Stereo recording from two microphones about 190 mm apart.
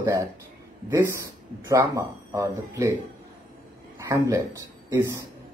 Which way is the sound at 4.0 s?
15° right (ahead or behind).